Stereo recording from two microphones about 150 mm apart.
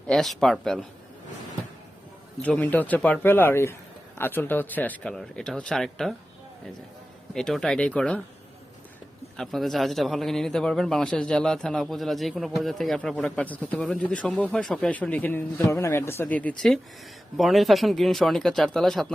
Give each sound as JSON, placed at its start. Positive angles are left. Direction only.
{"t": 0.1, "sound": "a man's voice", "side_deg": 0}
{"t": 2.4, "sound": "speech", "side_deg": 10}
{"t": 7.3, "sound": "a man's voice", "side_deg": 5}
{"t": 9.4, "sound": "a man's voice", "side_deg": 0}